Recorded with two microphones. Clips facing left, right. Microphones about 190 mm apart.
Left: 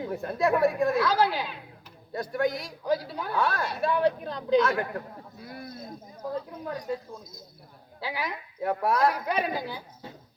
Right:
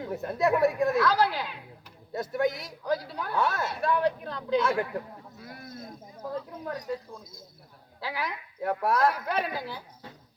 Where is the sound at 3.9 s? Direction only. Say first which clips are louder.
Left 1 dB; 20° left (ahead or behind).